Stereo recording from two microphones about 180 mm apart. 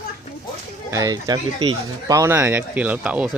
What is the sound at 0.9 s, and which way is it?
Speech, 20° right (ahead or behind).